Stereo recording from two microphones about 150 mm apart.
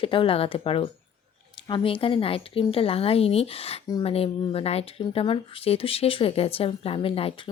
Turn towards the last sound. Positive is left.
turn(degrees=40)  # may be behind; listen again after turning